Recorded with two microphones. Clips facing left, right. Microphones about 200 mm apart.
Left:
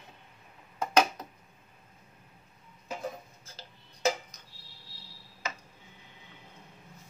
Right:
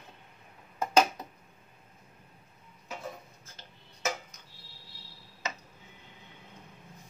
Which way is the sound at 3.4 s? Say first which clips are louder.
Left 2 dB; 30° left (ahead or behind).